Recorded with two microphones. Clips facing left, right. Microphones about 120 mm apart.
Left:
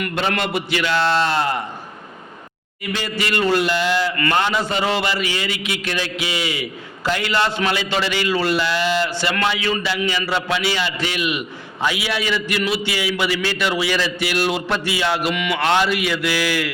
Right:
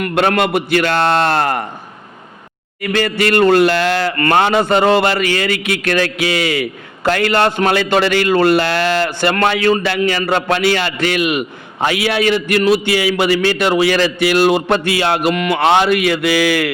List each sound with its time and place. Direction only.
0.1 s a man's voice: 60° right (ahead or behind)
2.8 s a man's voice: 60° right (ahead or behind)
4.2 s a man's voice: 55° right (ahead or behind)
15.3 s a man's voice: 45° right (ahead or behind); by 16.7 s 60° right (ahead or behind)